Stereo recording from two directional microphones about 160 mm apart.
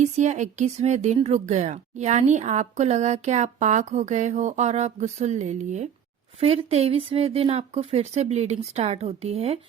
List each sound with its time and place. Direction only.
0.0 s speech: 45° right (ahead or behind)